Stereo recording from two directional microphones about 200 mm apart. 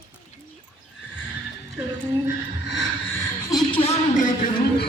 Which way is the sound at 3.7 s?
30° left (ahead or behind).